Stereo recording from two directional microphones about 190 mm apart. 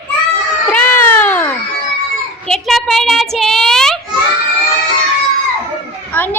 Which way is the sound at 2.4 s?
Centre (ahead or behind).